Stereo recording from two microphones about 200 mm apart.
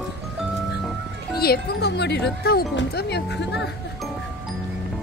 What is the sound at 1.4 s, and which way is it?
Speech, 55° left (ahead or behind).